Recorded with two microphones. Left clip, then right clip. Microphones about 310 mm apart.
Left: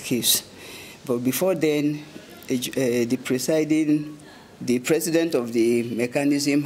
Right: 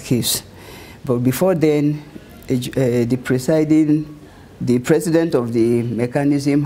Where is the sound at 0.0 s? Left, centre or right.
Right.